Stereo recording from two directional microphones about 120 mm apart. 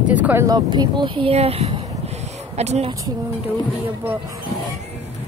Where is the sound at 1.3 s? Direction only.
60° right (ahead or behind).